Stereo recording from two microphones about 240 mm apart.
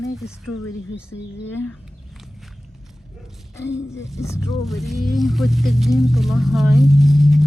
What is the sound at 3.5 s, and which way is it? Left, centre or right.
Speech, centre.